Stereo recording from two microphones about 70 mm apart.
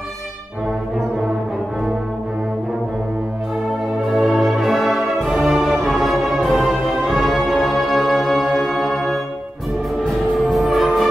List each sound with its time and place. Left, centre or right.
4.0 s brass instrument: centre
10.0 s music: centre